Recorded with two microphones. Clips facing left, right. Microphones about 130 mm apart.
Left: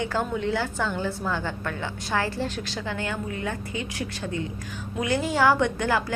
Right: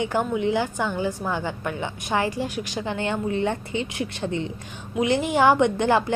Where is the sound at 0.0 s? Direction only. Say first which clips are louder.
Right 3 dB; 15° right (ahead or behind).